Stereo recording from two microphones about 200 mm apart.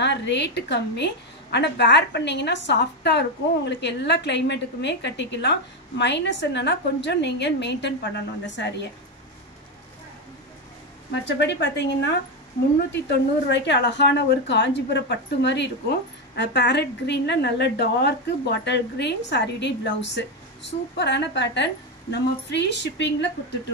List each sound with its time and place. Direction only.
0.0 s a woman's voice: 60° left (ahead or behind)
11.2 s a woman's voice: 60° left (ahead or behind)